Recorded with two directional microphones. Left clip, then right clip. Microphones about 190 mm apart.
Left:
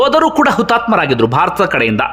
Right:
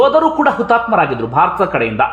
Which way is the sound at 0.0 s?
30° left (ahead or behind).